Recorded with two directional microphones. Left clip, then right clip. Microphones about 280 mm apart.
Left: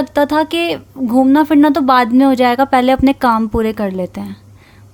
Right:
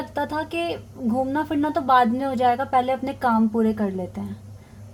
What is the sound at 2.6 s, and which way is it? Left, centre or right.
Speech, left.